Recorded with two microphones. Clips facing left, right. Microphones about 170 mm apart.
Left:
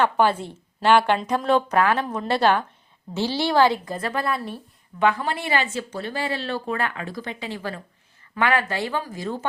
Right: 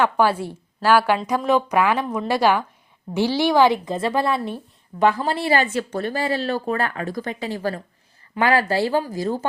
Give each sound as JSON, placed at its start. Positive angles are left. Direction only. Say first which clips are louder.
{"t": 0.0, "sound": "a woman's voice", "louder": "right 1 dB", "side_deg": -10}
{"t": 5.7, "sound": "speech", "louder": "right 5 dB", "side_deg": -50}